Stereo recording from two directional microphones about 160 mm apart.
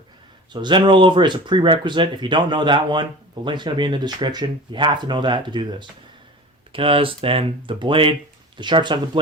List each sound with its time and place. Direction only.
0.5 s speech: 30° right (ahead or behind)
6.7 s speech: 35° right (ahead or behind)